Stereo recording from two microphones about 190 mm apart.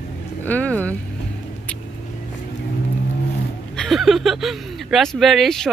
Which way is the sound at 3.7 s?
Centre (ahead or behind).